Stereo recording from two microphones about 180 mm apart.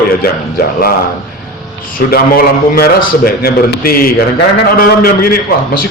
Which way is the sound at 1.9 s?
55° left (ahead or behind).